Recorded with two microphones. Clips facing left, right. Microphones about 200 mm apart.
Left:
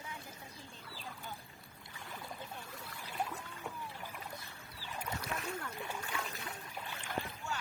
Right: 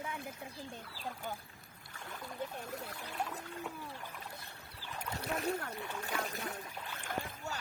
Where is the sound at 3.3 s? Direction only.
40° right (ahead or behind).